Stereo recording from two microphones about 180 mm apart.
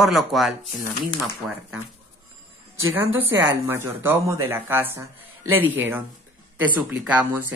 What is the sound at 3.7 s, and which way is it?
Speech, 15° right (ahead or behind).